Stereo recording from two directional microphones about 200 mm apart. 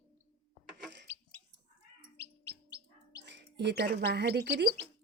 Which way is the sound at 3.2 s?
60° right (ahead or behind).